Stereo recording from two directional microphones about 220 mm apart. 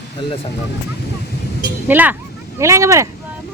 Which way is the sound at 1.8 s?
10° right (ahead or behind).